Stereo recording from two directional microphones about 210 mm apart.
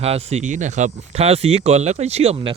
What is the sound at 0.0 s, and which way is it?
Speech, 30° right (ahead or behind).